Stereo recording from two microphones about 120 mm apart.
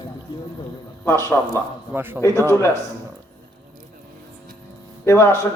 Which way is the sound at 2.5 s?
25° left (ahead or behind).